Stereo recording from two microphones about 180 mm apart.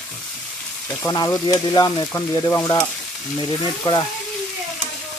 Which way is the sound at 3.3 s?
25° left (ahead or behind).